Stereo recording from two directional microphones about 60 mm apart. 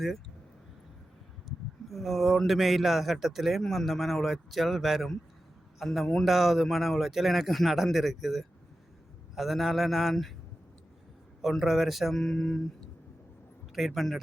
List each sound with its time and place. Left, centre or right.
1.5 s speech: centre
11.6 s speech: centre